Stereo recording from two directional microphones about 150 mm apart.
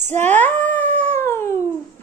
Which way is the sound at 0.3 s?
10° left (ahead or behind).